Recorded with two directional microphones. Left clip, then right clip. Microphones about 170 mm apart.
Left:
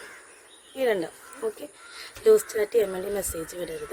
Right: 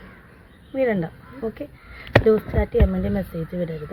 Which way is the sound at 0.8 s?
40° left (ahead or behind).